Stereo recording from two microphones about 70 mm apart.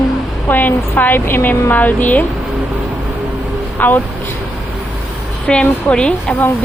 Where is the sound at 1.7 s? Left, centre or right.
Left.